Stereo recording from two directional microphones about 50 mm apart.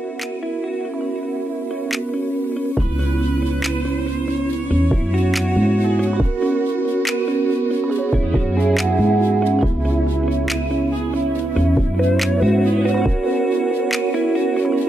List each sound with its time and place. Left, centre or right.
5.5 s music: left
12.2 s music: centre